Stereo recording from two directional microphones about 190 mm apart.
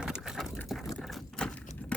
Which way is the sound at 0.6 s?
Centre (ahead or behind).